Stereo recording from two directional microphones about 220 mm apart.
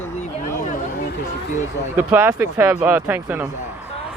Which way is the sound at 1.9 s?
10° right (ahead or behind).